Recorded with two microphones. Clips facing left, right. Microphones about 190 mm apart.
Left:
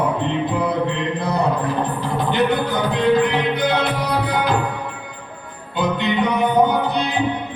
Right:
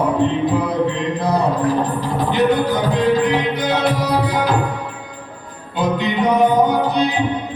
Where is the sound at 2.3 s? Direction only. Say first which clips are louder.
Right 3 dB; 60° left (ahead or behind).